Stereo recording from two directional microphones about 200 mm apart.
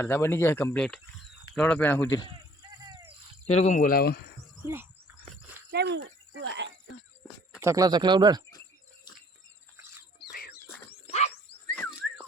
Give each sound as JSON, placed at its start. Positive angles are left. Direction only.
{"t": 0.0, "sound": "speech", "side_deg": 10}
{"t": 3.4, "sound": "speech", "side_deg": 35}
{"t": 4.6, "sound": "speech", "side_deg": -10}
{"t": 5.7, "sound": "speech", "side_deg": -55}
{"t": 6.0, "sound": "speech", "side_deg": -65}
{"t": 7.6, "sound": "speech", "side_deg": -15}
{"t": 11.8, "sound": "a sound", "side_deg": 5}